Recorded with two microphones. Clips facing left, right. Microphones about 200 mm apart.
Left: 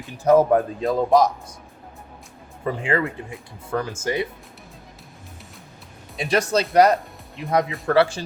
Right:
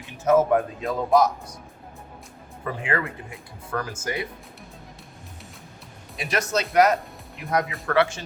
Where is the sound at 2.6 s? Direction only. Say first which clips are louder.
Left 5 dB; 25° left (ahead or behind).